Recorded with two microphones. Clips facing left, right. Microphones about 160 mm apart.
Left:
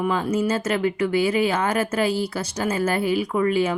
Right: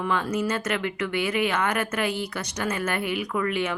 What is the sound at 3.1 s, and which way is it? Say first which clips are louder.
Speech: left 6 dB; 30° left (ahead or behind).